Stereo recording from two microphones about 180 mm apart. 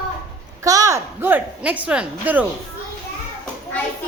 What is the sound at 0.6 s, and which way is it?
Speech, 20° right (ahead or behind).